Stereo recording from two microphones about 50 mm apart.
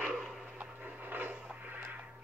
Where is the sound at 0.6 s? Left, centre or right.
Right.